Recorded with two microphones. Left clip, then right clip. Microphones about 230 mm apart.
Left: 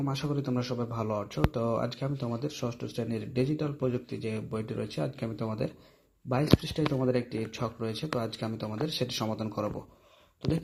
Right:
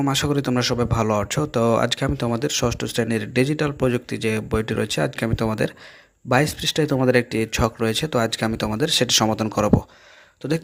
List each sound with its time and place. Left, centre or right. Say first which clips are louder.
0.0 s speech: right 12 dB; right